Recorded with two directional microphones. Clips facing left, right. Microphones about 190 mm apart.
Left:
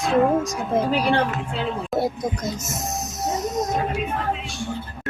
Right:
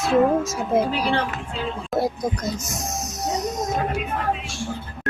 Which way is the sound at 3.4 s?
Centre (ahead or behind).